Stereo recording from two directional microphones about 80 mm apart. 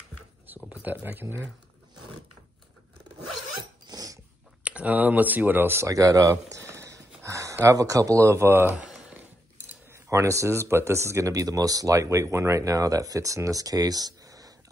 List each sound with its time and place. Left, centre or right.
0.7 s speech: right
3.8 s dog: right
4.6 s speech: centre
5.9 s speech: right
6.3 s a sound: right
7.7 s speech: right
9.8 s speech: right